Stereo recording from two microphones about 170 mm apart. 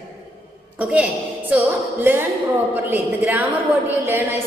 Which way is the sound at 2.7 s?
10° right (ahead or behind).